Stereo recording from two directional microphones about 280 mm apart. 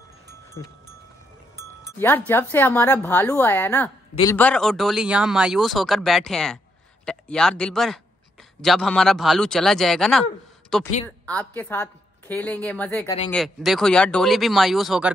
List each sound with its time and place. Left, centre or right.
2.0 s a woman's voice: centre